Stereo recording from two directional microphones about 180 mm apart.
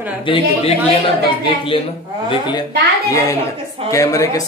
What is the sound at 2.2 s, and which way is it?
Speech, 25° left (ahead or behind).